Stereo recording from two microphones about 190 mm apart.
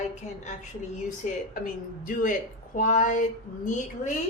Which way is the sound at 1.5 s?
45° left (ahead or behind).